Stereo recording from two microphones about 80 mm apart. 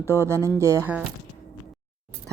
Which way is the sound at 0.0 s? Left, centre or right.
Right.